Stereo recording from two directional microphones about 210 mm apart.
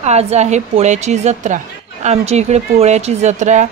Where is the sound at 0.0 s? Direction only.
30° right (ahead or behind).